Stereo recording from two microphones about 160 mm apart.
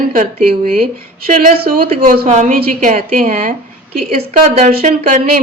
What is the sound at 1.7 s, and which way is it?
A woman's voice, 50° right (ahead or behind).